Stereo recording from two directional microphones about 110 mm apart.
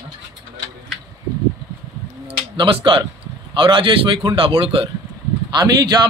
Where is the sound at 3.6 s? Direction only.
50° right (ahead or behind).